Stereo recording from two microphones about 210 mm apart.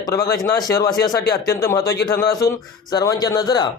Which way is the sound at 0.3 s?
15° left (ahead or behind).